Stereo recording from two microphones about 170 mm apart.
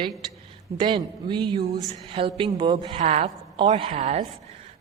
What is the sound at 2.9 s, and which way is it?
A man's voice, 40° right (ahead or behind).